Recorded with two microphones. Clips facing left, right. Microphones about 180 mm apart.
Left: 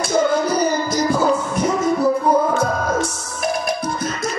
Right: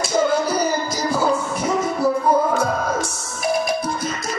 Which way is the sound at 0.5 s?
10° right (ahead or behind).